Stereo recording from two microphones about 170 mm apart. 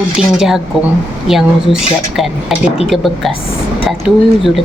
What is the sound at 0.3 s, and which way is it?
Speech, 5° right (ahead or behind).